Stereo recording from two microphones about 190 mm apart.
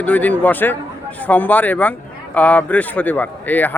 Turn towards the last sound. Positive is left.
turn(degrees=10)  # may be behind; listen again after turning